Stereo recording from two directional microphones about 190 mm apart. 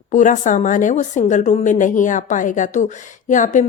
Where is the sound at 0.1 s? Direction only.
40° left (ahead or behind).